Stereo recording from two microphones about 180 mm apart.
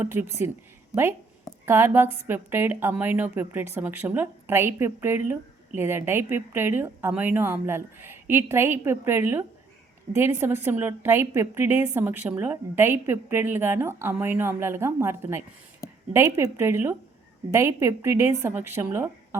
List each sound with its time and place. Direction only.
0.0 s a woman's voice: 10° right (ahead or behind)
0.9 s speech: 20° left (ahead or behind)
1.6 s a woman's voice: 15° right (ahead or behind)
15.8 s a sound: 15° left (ahead or behind)
16.1 s a woman's voice: 20° right (ahead or behind)